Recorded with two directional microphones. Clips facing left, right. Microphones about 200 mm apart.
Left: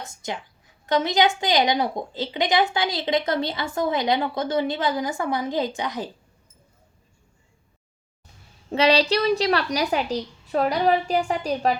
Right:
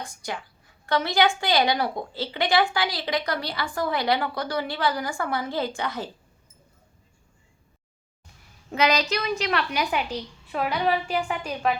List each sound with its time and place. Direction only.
0.0 s a woman's voice: 25° left (ahead or behind)
8.7 s a woman's voice: 30° left (ahead or behind)